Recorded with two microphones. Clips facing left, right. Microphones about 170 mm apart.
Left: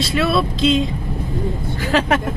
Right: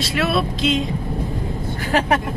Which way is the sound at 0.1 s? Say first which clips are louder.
Left 1 dB; 30° left (ahead or behind).